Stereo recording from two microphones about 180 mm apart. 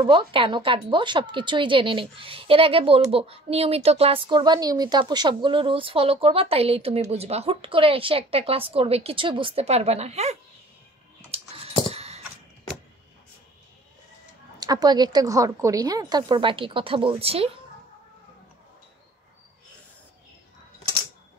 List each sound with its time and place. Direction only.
0.0 s a woman's voice: 30° right (ahead or behind)
11.2 s typing: 35° right (ahead or behind)
11.9 s caw: 35° right (ahead or behind)
14.6 s a woman's voice: 20° right (ahead or behind)